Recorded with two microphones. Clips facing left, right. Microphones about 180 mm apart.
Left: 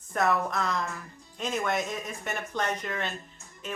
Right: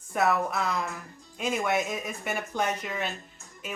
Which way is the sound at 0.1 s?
10° right (ahead or behind).